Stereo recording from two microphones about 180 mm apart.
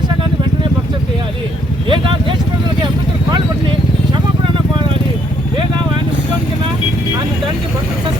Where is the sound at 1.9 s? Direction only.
30° right (ahead or behind).